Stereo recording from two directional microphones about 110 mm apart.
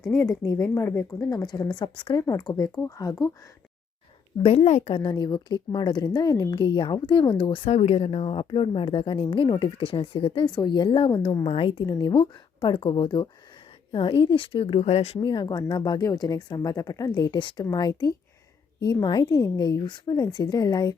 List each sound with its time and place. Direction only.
0.2 s a woman's voice: 30° left (ahead or behind)
1.2 s speech: 35° left (ahead or behind)
2.2 s speech: 30° left (ahead or behind)
4.4 s speech: 70° left (ahead or behind)
5.1 s a woman's voice: 40° left (ahead or behind)
7.7 s speech: 70° left (ahead or behind)
9.2 s a woman's voice: 45° left (ahead or behind)
10.4 s a woman's voice: 40° left (ahead or behind)
11.9 s a woman's voice: 40° left (ahead or behind)
14.8 s speech: 75° left (ahead or behind)
15.2 s speech: 45° left (ahead or behind)